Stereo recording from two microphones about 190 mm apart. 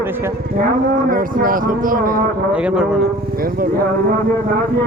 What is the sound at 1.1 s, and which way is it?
Speech, 45° right (ahead or behind).